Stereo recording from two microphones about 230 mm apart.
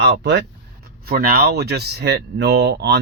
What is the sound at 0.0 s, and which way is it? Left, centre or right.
Speech, right.